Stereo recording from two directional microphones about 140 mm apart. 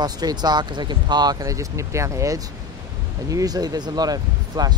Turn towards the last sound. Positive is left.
turn(degrees=-30)  # may be behind; listen again after turning